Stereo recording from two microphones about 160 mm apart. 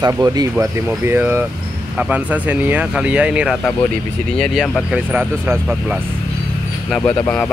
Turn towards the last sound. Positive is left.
turn(degrees=10)  # may be behind; listen again after turning